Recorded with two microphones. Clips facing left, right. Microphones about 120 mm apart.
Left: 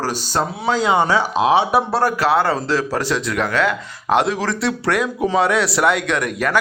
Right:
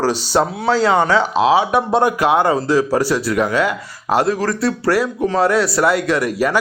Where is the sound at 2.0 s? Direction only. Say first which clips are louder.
Right 4 dB; 15° right (ahead or behind).